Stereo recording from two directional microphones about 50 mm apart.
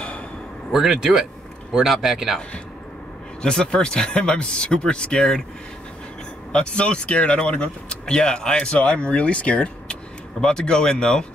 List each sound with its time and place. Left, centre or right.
0.7 s speech: centre
3.4 s speech: centre
6.5 s speech: left